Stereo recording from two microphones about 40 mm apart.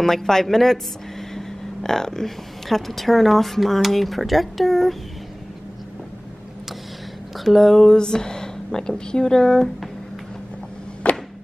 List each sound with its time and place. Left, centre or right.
0.0 s a woman's voice: centre
7.3 s speech: centre
7.9 s speech: centre
11.0 s a sound: left